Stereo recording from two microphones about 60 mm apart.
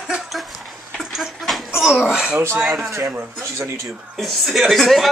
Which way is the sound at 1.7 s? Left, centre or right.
Centre.